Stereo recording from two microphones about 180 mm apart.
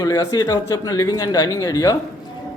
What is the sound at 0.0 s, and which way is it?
Speech, 20° left (ahead or behind).